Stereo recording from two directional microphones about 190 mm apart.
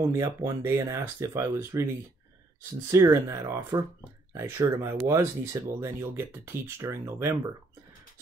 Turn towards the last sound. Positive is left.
turn(degrees=-15)  # may be behind; listen again after turning